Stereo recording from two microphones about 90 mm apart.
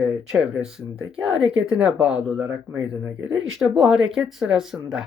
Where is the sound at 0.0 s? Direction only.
10° right (ahead or behind).